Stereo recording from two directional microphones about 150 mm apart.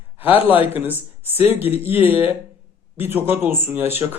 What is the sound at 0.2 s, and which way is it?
Speech, 10° right (ahead or behind).